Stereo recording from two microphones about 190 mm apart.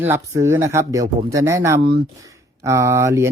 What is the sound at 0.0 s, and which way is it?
Speech, 15° right (ahead or behind).